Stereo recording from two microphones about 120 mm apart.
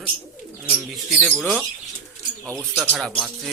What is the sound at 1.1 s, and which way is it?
Speech, centre (ahead or behind).